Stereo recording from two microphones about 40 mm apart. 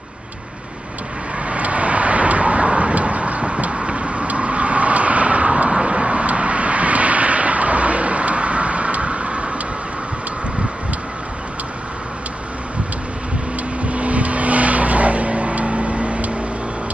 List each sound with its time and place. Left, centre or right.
1.5 s vehicle: right
13.8 s vehicle: right